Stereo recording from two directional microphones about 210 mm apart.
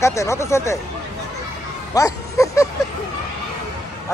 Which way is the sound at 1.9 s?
15° left (ahead or behind).